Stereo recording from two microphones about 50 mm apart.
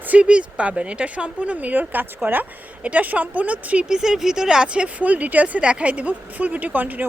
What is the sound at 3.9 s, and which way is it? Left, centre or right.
A woman's voice, centre.